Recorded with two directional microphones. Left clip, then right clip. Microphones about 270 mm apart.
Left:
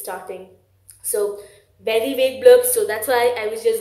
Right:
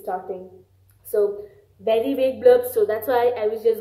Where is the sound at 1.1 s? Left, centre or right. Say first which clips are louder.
Right 1 dB; centre.